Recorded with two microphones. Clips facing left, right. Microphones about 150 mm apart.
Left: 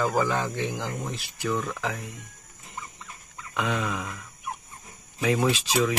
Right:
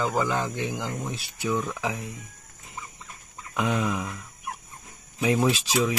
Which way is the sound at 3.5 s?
15° right (ahead or behind).